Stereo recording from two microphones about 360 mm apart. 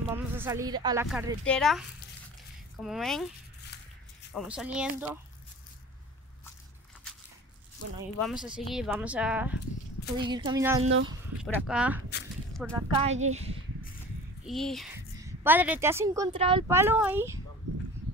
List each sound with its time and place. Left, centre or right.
0.1 s a sound: centre
1.0 s speech: centre
4.3 s speech: centre
8.2 s a woman's voice: centre
10.8 s speech: right
11.4 s speech: centre
13.0 s speech: centre
14.4 s a woman's voice: centre